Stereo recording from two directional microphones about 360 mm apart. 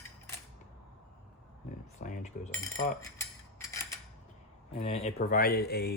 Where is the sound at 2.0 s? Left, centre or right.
Centre.